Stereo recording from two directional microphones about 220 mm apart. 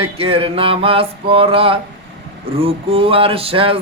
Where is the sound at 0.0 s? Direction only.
25° right (ahead or behind).